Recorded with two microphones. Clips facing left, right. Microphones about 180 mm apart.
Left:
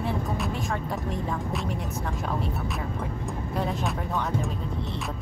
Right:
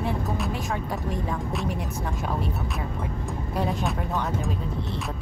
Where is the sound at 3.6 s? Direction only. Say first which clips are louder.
Right 2 dB; centre (ahead or behind).